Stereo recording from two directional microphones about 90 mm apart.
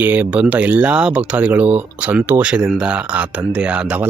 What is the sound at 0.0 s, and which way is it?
Speech, 15° right (ahead or behind).